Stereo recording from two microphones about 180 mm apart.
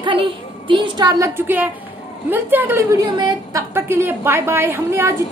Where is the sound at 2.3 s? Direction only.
10° right (ahead or behind).